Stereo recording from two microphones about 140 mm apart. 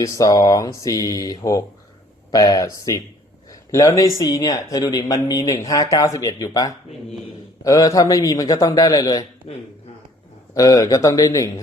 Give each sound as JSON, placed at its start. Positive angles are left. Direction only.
{"t": 0.0, "sound": "speech", "side_deg": 25}
{"t": 10.5, "sound": "speech", "side_deg": 25}